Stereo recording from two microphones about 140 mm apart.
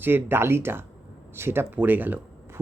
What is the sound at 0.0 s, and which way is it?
Speech, 15° right (ahead or behind).